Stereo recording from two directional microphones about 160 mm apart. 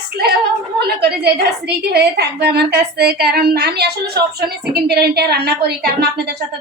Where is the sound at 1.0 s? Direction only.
90° right.